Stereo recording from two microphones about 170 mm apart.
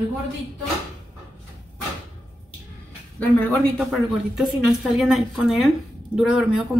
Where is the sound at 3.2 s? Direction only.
5° left (ahead or behind).